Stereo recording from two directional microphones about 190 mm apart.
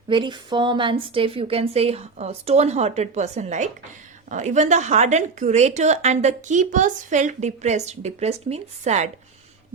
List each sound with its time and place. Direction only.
0.1 s a woman's voice: 25° right (ahead or behind)